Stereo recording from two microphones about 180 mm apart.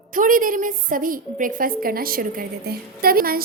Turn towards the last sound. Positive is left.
turn(degrees=-55)  # may be behind; listen again after turning